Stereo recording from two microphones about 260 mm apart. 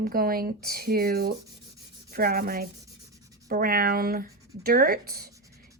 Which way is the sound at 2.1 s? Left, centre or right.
Right.